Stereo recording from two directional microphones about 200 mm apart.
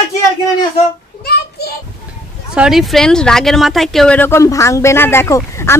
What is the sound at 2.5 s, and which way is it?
Speech, 5° right (ahead or behind).